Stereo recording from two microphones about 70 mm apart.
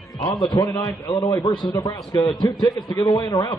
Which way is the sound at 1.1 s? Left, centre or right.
Left.